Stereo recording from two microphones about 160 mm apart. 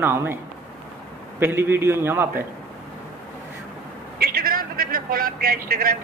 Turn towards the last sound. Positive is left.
turn(degrees=-65)  # may be behind; listen again after turning